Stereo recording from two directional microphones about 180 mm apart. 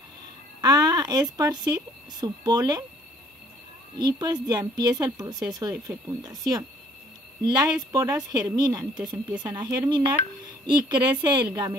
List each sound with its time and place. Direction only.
0.6 s speech: 20° right (ahead or behind)
4.0 s speech: 25° right (ahead or behind)
7.9 s speech: 20° right (ahead or behind)